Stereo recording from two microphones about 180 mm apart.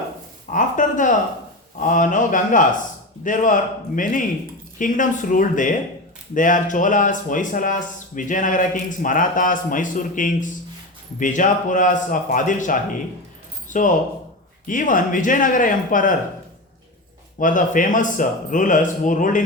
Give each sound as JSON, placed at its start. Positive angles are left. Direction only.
{"t": 0.5, "sound": "a sound", "side_deg": 45}
{"t": 1.8, "sound": "speech", "side_deg": 45}
{"t": 17.3, "sound": "speech", "side_deg": 45}